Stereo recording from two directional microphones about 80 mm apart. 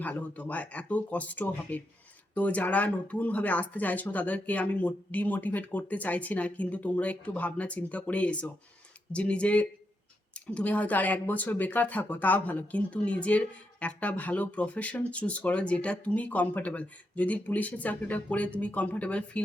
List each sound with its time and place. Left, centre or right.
0.0 s speech: centre